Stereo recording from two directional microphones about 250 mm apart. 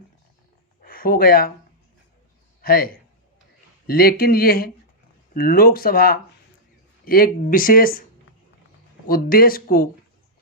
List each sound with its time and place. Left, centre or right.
0.8 s speech: left
2.6 s a man's voice: left
9.0 s speech: left